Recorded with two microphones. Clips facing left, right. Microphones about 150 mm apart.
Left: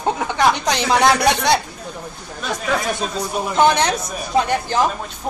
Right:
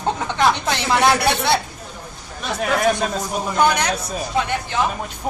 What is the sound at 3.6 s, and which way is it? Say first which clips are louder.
Speech: left 3 dB; 25° left (ahead or behind).